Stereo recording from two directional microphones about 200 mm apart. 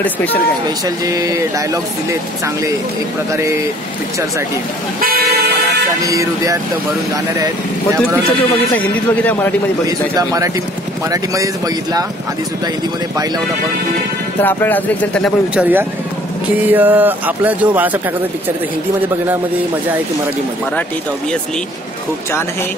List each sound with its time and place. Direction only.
0.0 s speech: 10° left (ahead or behind)
0.7 s speech: 20° right (ahead or behind)
6.0 s speech: 15° right (ahead or behind)
8.7 s speech: 10° left (ahead or behind)
9.8 s speech: 20° right (ahead or behind)
14.4 s speech: 10° left (ahead or behind); by 18.0 s 10° right (ahead or behind)